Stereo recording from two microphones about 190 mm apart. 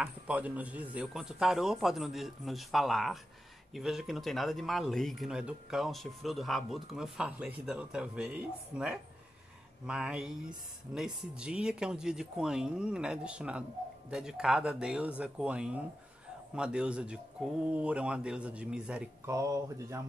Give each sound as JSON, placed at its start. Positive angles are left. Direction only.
{"t": 0.0, "sound": "speech", "side_deg": -10}
{"t": 19.3, "sound": "speech", "side_deg": -15}